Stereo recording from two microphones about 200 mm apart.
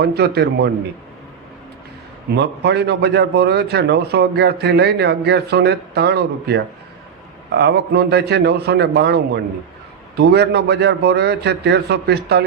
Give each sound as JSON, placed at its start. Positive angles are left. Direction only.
{"t": 0.0, "sound": "a man's voice", "side_deg": -55}
{"t": 2.3, "sound": "a man's voice", "side_deg": -60}